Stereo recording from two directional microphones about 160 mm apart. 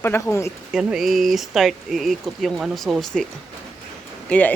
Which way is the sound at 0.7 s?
5° right (ahead or behind).